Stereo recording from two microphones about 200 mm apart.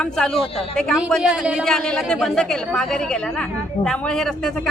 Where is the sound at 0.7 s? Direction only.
Centre (ahead or behind).